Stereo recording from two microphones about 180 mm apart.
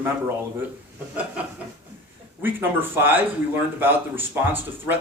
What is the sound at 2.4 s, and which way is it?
Speech, 10° right (ahead or behind).